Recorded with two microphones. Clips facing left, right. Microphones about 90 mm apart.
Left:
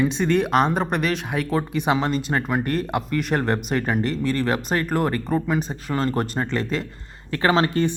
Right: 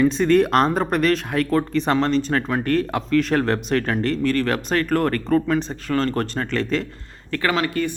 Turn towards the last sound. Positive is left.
turn(degrees=30)  # may be behind; listen again after turning